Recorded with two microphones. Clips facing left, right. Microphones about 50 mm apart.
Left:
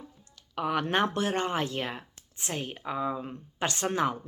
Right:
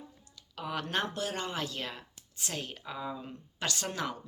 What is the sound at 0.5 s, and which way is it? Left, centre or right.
Speech, left.